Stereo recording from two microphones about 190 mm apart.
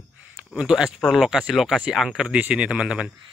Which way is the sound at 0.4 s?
5° right (ahead or behind).